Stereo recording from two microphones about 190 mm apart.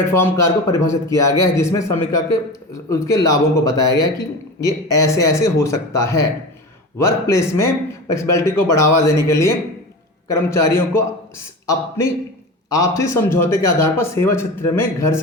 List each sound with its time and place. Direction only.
0.1 s a man's voice: 15° left (ahead or behind)
12.7 s a man's voice: 15° left (ahead or behind)